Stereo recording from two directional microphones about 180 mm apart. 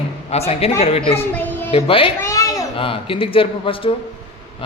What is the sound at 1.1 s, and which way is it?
Speech, 10° left (ahead or behind).